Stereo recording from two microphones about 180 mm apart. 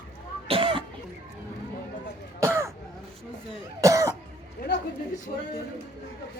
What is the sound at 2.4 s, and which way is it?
Throat clearing, 15° right (ahead or behind).